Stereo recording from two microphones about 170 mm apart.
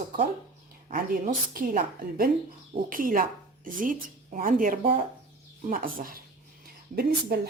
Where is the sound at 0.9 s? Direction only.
55° right (ahead or behind).